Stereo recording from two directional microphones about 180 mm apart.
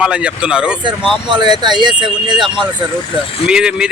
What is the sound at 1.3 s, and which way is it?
Speech, 25° right (ahead or behind).